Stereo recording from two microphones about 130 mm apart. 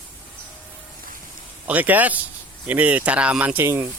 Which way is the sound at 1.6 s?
10° right (ahead or behind).